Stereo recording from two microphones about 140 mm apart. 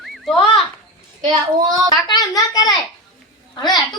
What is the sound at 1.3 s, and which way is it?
Speech, 30° right (ahead or behind).